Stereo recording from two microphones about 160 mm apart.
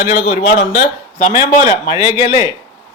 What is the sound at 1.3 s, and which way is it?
A man's voice, 20° right (ahead or behind).